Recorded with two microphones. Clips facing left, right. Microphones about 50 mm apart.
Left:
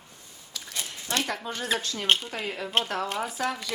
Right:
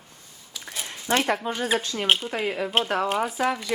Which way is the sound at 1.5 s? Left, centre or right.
Centre.